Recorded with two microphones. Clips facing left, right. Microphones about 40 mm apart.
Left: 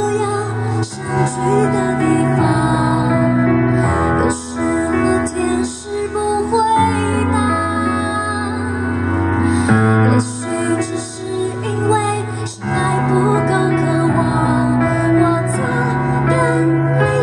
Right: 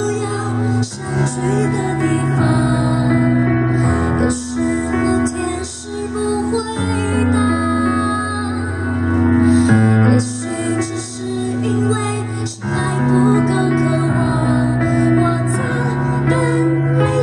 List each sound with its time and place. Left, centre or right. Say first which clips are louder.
1.1 s music: left 3 dB; left
3.4 s music: left 2 dB; left
3.8 s music: left 1 dB; left
9.2 s music: right 5 dB; left
12.7 s music: left 1 dB; left